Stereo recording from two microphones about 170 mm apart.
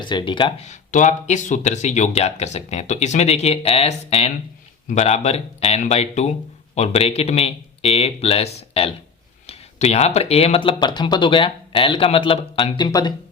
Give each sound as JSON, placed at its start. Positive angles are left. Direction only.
{"t": 0.0, "sound": "speech", "side_deg": 30}
{"t": 0.7, "sound": "speech", "side_deg": 45}